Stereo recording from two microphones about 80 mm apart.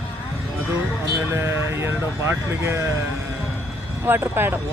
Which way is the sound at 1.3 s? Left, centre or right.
Right.